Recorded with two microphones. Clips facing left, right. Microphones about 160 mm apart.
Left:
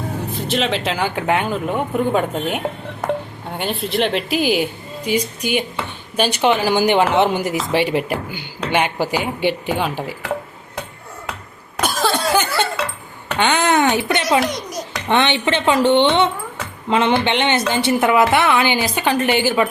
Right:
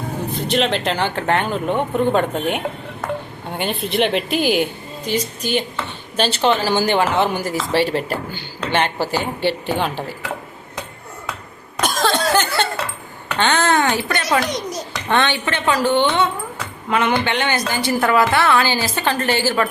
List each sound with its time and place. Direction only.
0.3 s a woman's voice: centre (ahead or behind)
11.8 s laughter: 5° left (ahead or behind)
13.4 s a woman's voice: 15° left (ahead or behind)